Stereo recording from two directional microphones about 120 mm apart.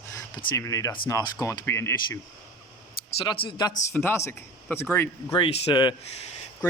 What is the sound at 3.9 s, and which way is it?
Speech, 20° left (ahead or behind).